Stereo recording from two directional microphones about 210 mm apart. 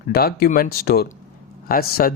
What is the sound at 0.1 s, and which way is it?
Speech, 50° left (ahead or behind).